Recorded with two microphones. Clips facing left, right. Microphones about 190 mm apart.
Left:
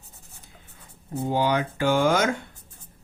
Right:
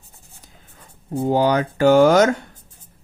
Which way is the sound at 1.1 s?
50° right (ahead or behind).